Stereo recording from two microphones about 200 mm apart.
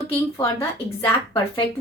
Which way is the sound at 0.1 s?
15° left (ahead or behind).